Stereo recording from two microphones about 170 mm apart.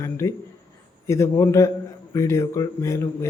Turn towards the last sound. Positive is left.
turn(degrees=15)  # may be behind; listen again after turning